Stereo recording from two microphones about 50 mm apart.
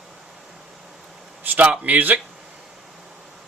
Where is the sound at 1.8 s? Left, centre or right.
Right.